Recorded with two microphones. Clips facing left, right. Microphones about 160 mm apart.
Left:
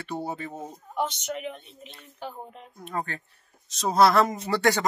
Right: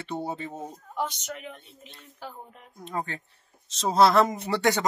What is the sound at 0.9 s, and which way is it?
Speech, 20° left (ahead or behind).